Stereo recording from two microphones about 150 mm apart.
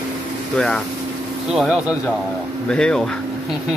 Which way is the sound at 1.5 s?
Centre (ahead or behind).